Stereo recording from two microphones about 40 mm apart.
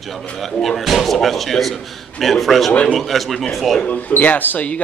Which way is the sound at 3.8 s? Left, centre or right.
Left.